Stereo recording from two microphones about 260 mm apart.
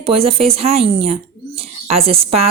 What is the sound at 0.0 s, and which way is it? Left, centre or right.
Speech, right.